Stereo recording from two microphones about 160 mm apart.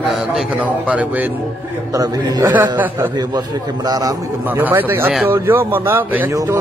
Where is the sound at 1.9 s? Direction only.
25° right (ahead or behind).